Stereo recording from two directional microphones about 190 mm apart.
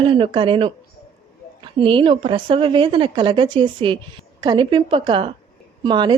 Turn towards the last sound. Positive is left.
turn(degrees=-25)  # may be behind; listen again after turning